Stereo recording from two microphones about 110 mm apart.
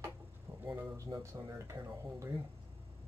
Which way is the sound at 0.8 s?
35° right (ahead or behind).